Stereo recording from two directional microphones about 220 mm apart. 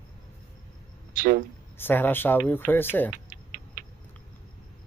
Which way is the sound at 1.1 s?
40° right (ahead or behind).